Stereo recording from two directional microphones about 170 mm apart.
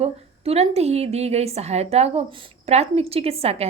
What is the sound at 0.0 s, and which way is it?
A woman's voice, 35° right (ahead or behind).